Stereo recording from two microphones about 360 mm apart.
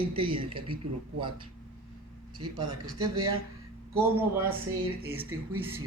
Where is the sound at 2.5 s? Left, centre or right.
Centre.